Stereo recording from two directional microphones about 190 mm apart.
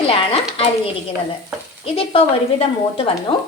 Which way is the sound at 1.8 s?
30° left (ahead or behind).